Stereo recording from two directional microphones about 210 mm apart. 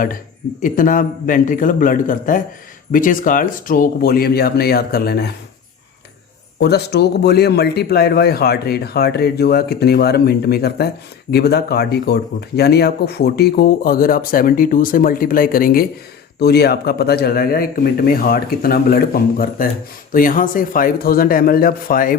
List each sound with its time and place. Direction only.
0.6 s a man's voice: 40° left (ahead or behind)
6.6 s speech: 50° left (ahead or behind)